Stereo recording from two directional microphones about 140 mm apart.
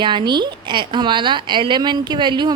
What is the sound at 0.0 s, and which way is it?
A woman's voice, 35° right (ahead or behind).